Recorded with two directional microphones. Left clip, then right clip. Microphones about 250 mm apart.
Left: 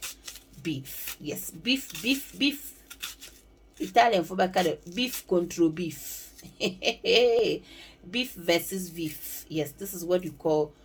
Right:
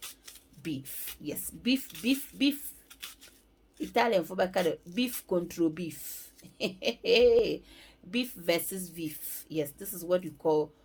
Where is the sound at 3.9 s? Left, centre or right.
Right.